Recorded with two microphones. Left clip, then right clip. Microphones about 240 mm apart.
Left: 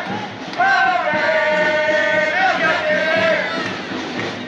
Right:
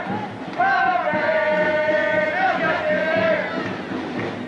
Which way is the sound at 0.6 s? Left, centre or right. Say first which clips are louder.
Left 3 dB; centre.